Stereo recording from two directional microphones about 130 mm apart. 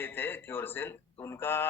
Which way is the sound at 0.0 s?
15° left (ahead or behind).